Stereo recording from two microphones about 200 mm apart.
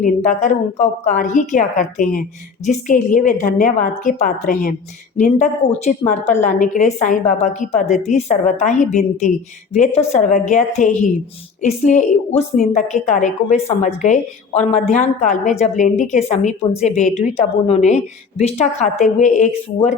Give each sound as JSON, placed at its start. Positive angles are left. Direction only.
{"t": 0.0, "sound": "a woman's voice", "side_deg": 40}